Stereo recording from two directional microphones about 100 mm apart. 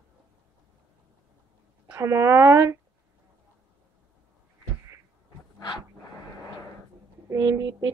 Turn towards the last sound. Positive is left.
turn(degrees=-30)  # may be behind; listen again after turning